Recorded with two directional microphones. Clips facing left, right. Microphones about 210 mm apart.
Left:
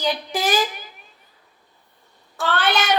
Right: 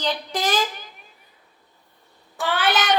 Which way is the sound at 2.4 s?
10° right (ahead or behind).